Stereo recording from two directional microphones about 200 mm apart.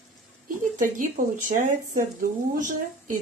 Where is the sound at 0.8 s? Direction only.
40° right (ahead or behind).